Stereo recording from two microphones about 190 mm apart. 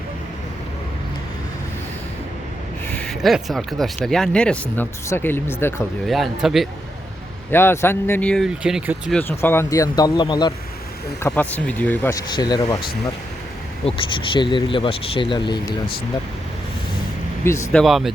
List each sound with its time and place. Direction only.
3.0 s speech: centre (ahead or behind)
6.1 s speech: centre (ahead or behind)
7.5 s speech: 10° left (ahead or behind)
9.3 s speech: 15° left (ahead or behind)
11.2 s speech: 10° left (ahead or behind)
12.3 s speech: 20° left (ahead or behind)
13.8 s speech: 25° left (ahead or behind)
17.4 s speech: 15° left (ahead or behind)